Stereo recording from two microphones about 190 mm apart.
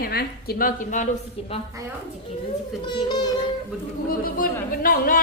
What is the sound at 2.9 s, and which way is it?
Music, 25° left (ahead or behind).